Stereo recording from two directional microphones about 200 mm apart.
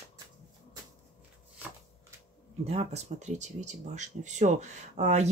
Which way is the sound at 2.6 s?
30° right (ahead or behind).